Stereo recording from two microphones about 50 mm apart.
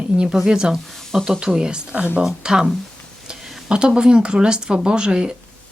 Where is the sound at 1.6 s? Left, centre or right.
Centre.